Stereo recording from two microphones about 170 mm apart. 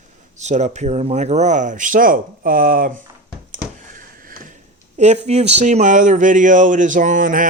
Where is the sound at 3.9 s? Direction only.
55° right (ahead or behind).